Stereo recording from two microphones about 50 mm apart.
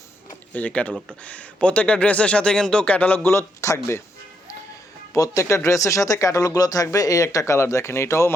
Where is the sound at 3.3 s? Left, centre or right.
Left.